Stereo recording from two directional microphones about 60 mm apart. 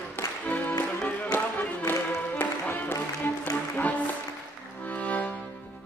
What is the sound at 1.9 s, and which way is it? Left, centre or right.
Music, left.